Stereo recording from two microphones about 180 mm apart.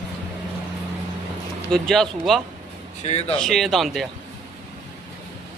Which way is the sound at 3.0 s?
35° left (ahead or behind).